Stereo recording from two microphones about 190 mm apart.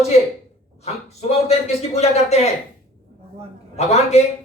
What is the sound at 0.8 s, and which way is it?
A man's voice, 35° left (ahead or behind).